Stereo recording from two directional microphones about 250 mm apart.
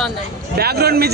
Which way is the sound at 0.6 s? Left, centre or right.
Right.